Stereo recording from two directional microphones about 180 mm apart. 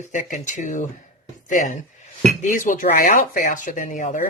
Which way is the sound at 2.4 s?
45° left (ahead or behind).